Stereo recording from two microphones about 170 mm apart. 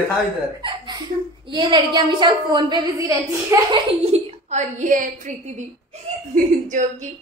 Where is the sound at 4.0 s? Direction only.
40° right (ahead or behind).